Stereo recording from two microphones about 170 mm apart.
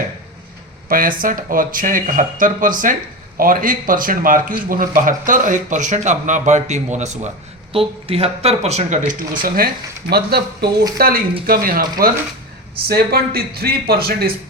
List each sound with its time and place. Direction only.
0.9 s speech: 55° right (ahead or behind)